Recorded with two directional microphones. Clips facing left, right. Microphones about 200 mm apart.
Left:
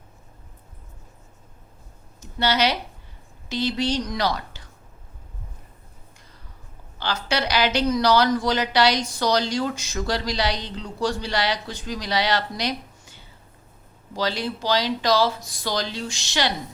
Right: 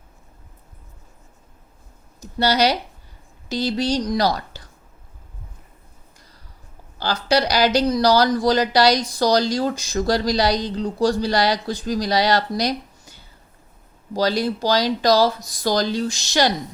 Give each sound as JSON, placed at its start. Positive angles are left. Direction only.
{"t": 2.2, "sound": "speech", "side_deg": -40}
{"t": 7.0, "sound": "speech", "side_deg": -35}